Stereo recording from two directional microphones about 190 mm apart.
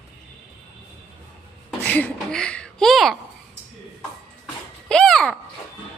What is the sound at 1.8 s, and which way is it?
Speech, 10° left (ahead or behind).